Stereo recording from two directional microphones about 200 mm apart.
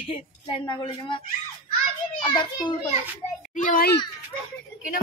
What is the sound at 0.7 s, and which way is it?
Speech, 25° left (ahead or behind).